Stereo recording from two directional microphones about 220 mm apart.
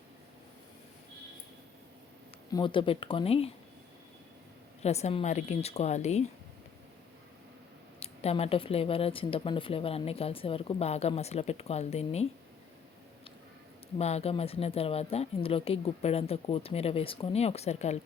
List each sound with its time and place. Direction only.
2.5 s speech: 20° left (ahead or behind)
4.8 s speech: 30° left (ahead or behind)
7.9 s speech: 30° left (ahead or behind)
14.0 s speech: 30° left (ahead or behind)